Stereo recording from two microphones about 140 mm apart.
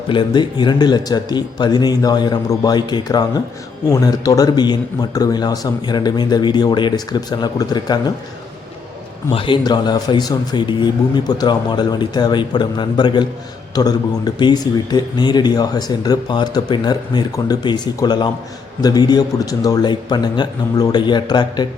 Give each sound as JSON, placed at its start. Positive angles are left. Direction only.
{"t": 0.1, "sound": "speech", "side_deg": 35}
{"t": 9.3, "sound": "speech", "side_deg": 35}